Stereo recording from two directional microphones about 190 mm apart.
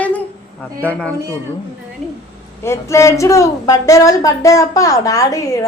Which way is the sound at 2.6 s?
15° left (ahead or behind).